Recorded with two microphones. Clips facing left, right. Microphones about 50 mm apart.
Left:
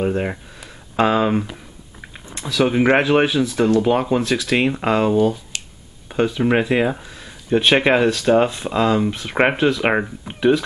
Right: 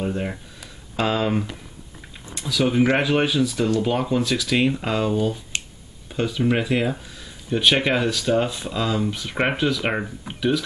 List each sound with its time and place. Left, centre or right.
0.0 s speech: left
2.3 s speech: left
5.5 s finger snapping: right
6.0 s speech: left
10.3 s speech: centre